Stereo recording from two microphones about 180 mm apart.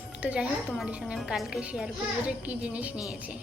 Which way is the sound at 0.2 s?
5° right (ahead or behind).